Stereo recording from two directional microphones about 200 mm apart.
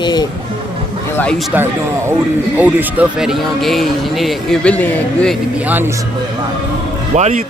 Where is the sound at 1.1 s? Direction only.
5° left (ahead or behind).